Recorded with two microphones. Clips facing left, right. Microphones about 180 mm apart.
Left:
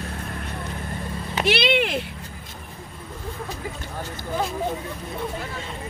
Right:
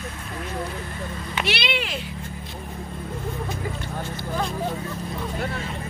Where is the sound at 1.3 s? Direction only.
50° left (ahead or behind).